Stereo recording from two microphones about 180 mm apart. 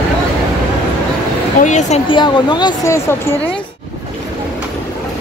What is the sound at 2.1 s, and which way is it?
Speech, 25° left (ahead or behind).